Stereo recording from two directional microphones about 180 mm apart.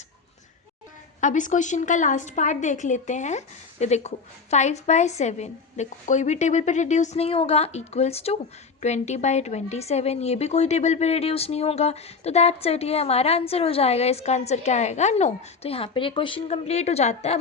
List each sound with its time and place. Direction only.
1.2 s a woman's voice: 45° left (ahead or behind)